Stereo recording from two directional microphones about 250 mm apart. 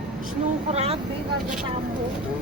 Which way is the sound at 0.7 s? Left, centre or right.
Right.